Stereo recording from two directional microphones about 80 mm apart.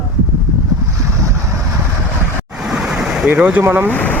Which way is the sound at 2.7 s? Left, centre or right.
Centre.